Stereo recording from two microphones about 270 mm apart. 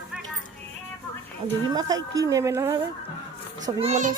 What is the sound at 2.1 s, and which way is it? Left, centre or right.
Speech, centre.